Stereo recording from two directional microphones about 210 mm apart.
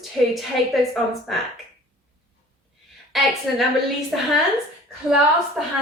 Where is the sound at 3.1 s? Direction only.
Centre (ahead or behind).